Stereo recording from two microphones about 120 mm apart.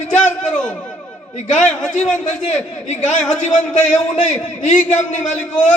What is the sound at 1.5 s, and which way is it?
A man's voice, 90° left.